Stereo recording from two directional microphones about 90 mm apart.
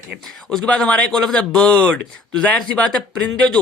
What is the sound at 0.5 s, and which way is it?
Speech, 10° left (ahead or behind).